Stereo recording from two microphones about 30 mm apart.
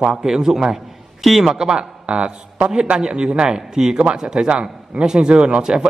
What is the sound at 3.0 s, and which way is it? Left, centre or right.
Speech, right.